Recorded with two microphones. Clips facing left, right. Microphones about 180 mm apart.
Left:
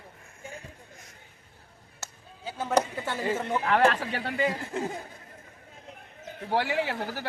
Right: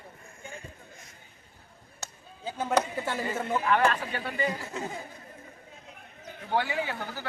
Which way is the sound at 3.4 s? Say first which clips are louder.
Even; 5° right (ahead or behind).